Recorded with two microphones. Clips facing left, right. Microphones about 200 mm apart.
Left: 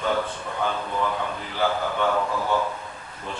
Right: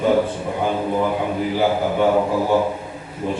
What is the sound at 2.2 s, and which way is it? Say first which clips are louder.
Speech: right 7 dB; 35° right (ahead or behind).